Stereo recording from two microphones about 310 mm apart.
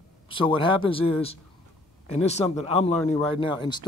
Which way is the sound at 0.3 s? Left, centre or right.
Centre.